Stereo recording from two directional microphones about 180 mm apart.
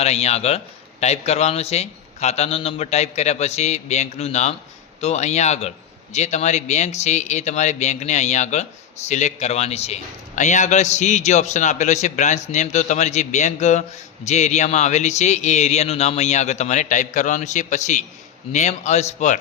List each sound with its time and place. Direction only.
0.0 s speech: 35° left (ahead or behind)